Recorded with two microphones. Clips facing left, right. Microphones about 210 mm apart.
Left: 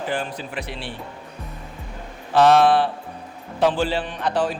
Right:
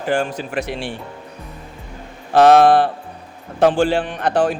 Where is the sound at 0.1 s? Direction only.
45° right (ahead or behind).